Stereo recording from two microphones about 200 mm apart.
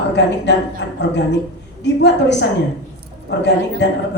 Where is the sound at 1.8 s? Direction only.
60° left (ahead or behind).